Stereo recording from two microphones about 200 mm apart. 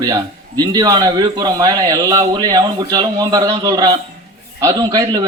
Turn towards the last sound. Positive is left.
turn(degrees=-20)  # may be behind; listen again after turning